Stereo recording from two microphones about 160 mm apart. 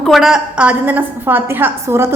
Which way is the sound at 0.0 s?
Centre (ahead or behind).